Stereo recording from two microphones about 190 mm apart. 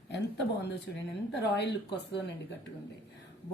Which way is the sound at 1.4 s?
60° left (ahead or behind).